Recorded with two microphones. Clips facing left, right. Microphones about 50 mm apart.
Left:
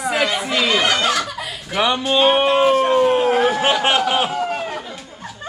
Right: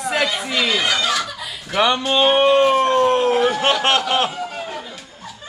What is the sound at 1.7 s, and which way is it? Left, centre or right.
Speech, centre.